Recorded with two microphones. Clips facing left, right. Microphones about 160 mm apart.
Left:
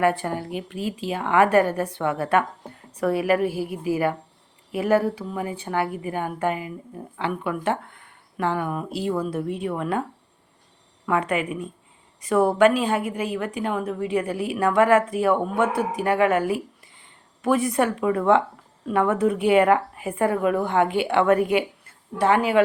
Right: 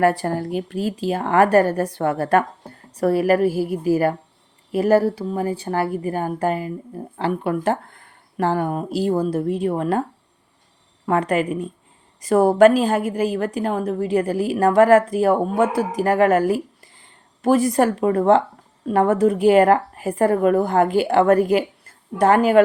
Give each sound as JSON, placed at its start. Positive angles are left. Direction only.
{"t": 0.0, "sound": "a woman's voice", "side_deg": -40}
{"t": 11.0, "sound": "a woman's voice", "side_deg": -40}